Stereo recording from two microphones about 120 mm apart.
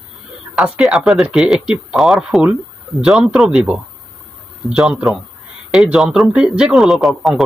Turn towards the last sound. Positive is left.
turn(degrees=0)  # may be behind; listen again after turning